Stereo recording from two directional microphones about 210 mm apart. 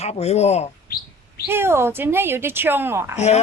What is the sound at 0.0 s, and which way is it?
Speech, 30° left (ahead or behind).